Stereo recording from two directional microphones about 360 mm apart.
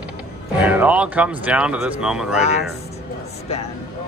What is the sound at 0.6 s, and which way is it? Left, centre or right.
Speech, centre.